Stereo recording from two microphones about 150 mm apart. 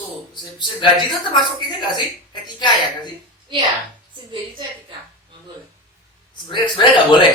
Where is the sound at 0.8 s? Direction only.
30° left (ahead or behind).